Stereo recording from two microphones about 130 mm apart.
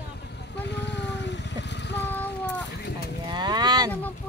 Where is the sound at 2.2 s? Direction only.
10° left (ahead or behind).